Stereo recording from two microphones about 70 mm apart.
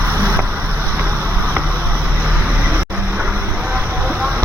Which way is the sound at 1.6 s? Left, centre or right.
Right.